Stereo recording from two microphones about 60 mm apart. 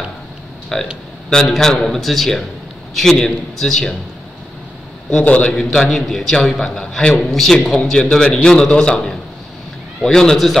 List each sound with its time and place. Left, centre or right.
0.7 s a man's voice: centre
5.2 s a man's voice: left
5.6 s a man's voice: centre